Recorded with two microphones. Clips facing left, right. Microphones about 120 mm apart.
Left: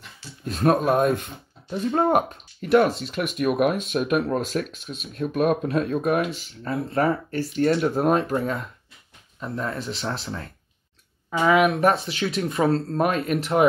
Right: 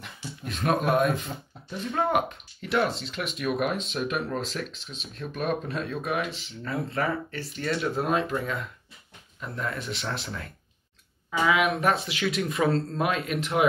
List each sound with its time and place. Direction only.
0.5 s speech: 40° left (ahead or behind)
6.6 s speech: 35° left (ahead or behind); by 8.2 s 50° left (ahead or behind)
8.3 s speech: 35° left (ahead or behind)
11.2 s speech: 40° left (ahead or behind)
11.9 s speech: 25° left (ahead or behind)
12.9 s speech: 45° left (ahead or behind)